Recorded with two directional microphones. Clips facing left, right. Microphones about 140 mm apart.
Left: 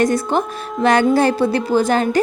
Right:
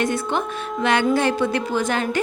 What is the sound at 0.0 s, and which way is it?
A woman's voice, 40° left (ahead or behind).